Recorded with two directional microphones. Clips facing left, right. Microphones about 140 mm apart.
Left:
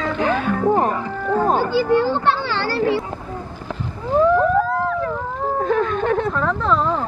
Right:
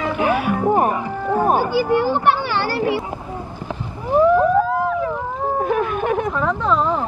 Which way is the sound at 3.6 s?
15° right (ahead or behind).